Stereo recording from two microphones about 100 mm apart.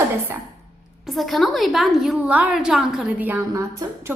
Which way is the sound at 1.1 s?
Centre (ahead or behind).